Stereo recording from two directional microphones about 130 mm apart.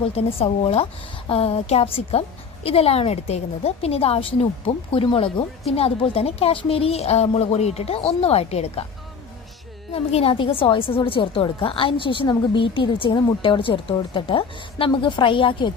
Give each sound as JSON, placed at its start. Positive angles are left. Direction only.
{"t": 0.0, "sound": "speech", "side_deg": 45}
{"t": 9.9, "sound": "a woman's voice", "side_deg": 50}